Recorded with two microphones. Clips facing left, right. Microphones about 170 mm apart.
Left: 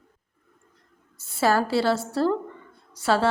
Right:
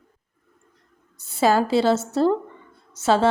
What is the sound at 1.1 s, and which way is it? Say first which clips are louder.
A woman's voice: right 3 dB; 15° right (ahead or behind).